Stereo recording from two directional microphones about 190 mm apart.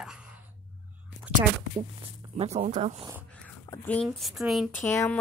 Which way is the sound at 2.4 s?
35° right (ahead or behind).